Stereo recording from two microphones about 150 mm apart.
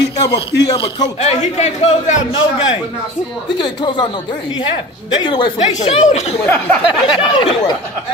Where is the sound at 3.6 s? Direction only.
30° left (ahead or behind).